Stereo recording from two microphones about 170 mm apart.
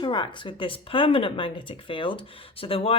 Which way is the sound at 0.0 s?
30° left (ahead or behind).